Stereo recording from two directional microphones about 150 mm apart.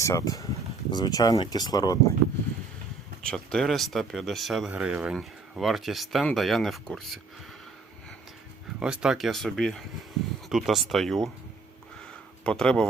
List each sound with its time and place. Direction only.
0.0 s speech: 20° left (ahead or behind)
3.2 s speech: 5° left (ahead or behind)
8.8 s speech: 5° right (ahead or behind)
12.5 s speech: 5° left (ahead or behind)